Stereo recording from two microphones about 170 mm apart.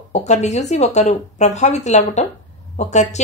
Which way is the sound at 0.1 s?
40° left (ahead or behind).